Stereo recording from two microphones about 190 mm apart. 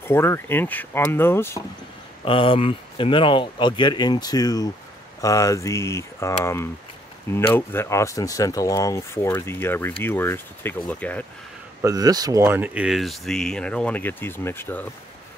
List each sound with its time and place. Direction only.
0.0 s speech: 15° left (ahead or behind)
2.2 s speech: 30° left (ahead or behind); by 11.2 s 10° left (ahead or behind)
11.8 s speech: 20° right (ahead or behind); by 14.9 s 10° left (ahead or behind)